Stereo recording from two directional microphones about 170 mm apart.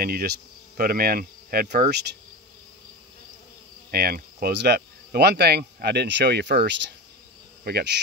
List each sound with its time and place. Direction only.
0.0 s cricket: 60° right (ahead or behind)
3.9 s cricket: 65° right (ahead or behind)
7.6 s insect: 70° right (ahead or behind)